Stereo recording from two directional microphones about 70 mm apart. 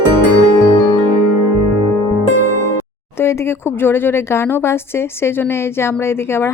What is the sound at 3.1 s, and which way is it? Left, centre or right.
Speech, left.